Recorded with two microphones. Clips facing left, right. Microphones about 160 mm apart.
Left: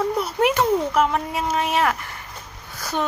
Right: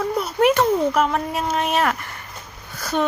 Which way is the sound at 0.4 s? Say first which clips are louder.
Right 3 dB; 15° left (ahead or behind).